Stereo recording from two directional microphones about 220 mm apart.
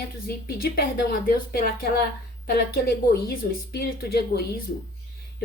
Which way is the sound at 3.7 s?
45° left (ahead or behind).